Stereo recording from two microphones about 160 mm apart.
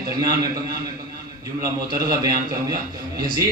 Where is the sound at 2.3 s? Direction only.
70° right (ahead or behind).